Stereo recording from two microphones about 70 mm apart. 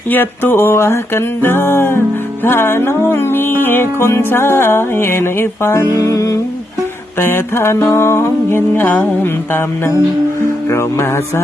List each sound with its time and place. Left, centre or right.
0.1 s music: left
5.9 s music: left
7.2 s music: left